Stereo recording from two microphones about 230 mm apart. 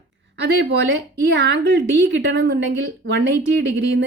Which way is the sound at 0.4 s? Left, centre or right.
Right.